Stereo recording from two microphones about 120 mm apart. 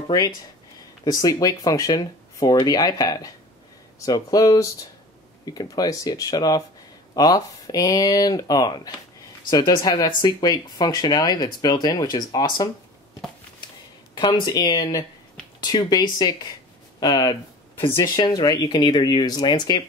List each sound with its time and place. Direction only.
1.2 s speech: 30° left (ahead or behind)
14.1 s speech: 40° left (ahead or behind)